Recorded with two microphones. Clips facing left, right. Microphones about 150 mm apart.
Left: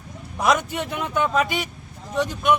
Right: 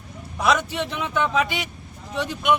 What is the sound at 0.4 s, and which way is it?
Speech, 50° left (ahead or behind).